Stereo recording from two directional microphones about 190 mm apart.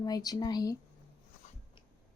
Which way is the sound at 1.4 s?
40° left (ahead or behind).